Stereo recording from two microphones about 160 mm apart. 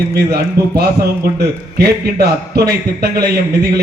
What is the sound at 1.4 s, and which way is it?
A man's voice, 80° right.